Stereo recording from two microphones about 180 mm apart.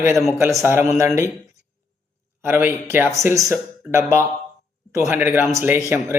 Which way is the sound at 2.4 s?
10° right (ahead or behind).